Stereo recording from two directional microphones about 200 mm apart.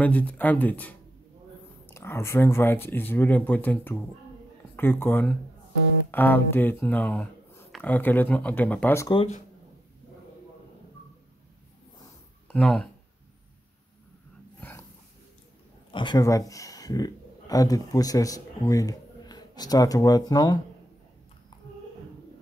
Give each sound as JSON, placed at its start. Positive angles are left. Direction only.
{"t": 0.0, "sound": "speech", "side_deg": 5}
{"t": 12.4, "sound": "speech", "side_deg": 5}
{"t": 14.6, "sound": "dog", "side_deg": 10}
{"t": 15.9, "sound": "speech", "side_deg": 25}